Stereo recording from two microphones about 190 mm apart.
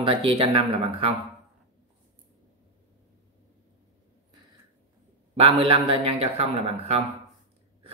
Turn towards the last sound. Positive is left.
turn(degrees=-30)  # may be behind; listen again after turning